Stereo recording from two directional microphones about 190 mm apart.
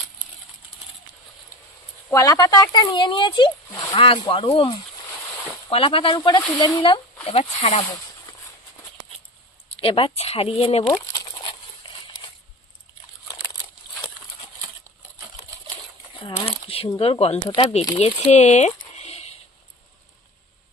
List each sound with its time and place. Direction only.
2.0 s speech: 15° left (ahead or behind)
9.8 s speech: 30° left (ahead or behind)
16.3 s crumpling: 30° left (ahead or behind)
17.0 s speech: 30° left (ahead or behind)
17.9 s speech: 35° left (ahead or behind)